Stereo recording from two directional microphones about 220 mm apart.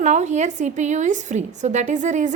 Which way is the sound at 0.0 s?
30° right (ahead or behind).